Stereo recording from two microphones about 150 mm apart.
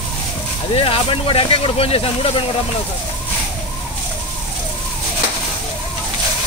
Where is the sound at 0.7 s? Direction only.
40° left (ahead or behind).